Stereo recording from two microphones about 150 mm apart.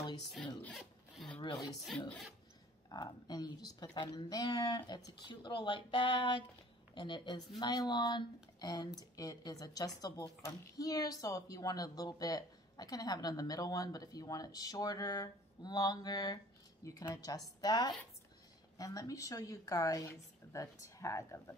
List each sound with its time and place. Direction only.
0.6 s rub: 5° left (ahead or behind)
1.4 s speech: 25° left (ahead or behind)
1.9 s speech: 5° left (ahead or behind)
2.9 s speech: 25° left (ahead or behind)